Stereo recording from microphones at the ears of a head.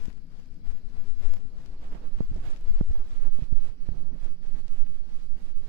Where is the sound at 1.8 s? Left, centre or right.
Right.